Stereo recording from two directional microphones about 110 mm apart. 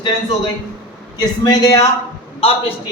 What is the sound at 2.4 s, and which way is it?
Speech, 60° left (ahead or behind).